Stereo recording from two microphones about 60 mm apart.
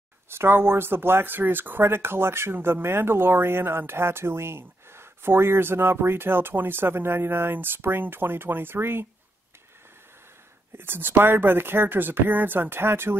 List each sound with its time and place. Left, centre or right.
0.3 s speech: right
10.8 s speech: right